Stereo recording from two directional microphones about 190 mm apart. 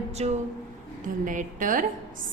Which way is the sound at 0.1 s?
35° right (ahead or behind).